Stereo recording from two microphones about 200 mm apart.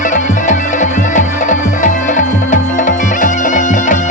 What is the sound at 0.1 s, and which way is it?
Music, 40° left (ahead or behind).